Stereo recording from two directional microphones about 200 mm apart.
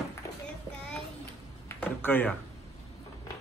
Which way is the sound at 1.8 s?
10° left (ahead or behind).